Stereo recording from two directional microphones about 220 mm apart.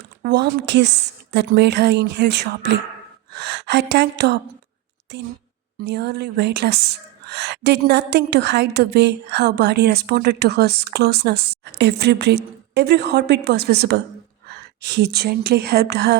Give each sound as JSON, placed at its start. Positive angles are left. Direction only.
{"t": 0.2, "sound": "a woman's voice", "side_deg": -50}